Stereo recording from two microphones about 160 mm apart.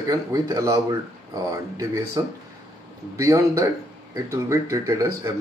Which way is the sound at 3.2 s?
20° right (ahead or behind).